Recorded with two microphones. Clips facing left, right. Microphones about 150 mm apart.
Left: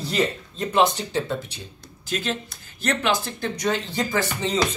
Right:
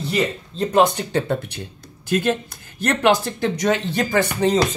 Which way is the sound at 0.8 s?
55° right (ahead or behind).